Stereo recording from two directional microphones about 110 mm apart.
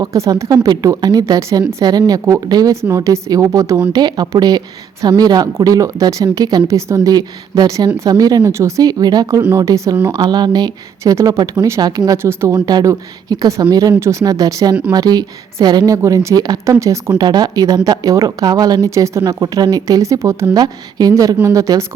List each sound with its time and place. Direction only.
0.0 s a woman's voice: 30° right (ahead or behind)
12.5 s speech: 40° right (ahead or behind)
17.2 s a woman's voice: 40° right (ahead or behind)